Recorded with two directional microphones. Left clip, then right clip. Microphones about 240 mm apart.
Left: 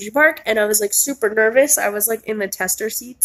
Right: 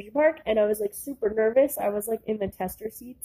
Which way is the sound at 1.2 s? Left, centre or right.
Centre.